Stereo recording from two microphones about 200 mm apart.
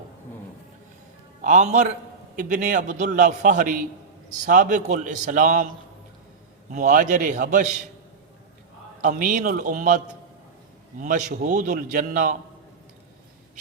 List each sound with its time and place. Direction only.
1.4 s a man's voice: 40° right (ahead or behind)
6.7 s a man's voice: 40° right (ahead or behind)
9.0 s a man's voice: 40° right (ahead or behind)
11.0 s a man's voice: 40° right (ahead or behind)